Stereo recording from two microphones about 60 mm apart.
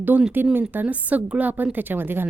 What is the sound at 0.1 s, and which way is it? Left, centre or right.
A woman's voice, right.